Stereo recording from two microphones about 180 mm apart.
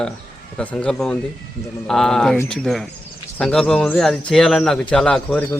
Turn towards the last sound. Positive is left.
turn(degrees=5)  # may be behind; listen again after turning